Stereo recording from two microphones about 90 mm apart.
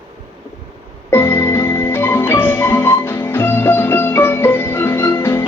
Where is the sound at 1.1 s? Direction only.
25° left (ahead or behind).